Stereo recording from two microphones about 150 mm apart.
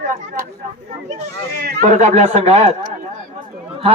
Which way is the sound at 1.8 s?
50° right (ahead or behind).